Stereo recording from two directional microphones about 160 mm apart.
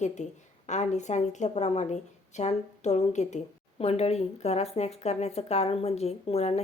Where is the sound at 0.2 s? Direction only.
45° left (ahead or behind).